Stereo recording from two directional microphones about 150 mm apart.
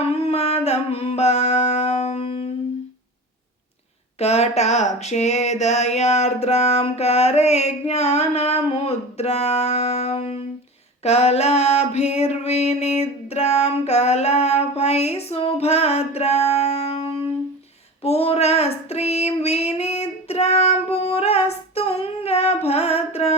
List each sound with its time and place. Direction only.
0.1 s music: 45° left (ahead or behind)
4.2 s a sound: 45° left (ahead or behind)
18.0 s child singing: 40° left (ahead or behind)